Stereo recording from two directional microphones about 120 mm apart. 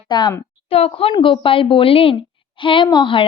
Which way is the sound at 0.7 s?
55° left (ahead or behind).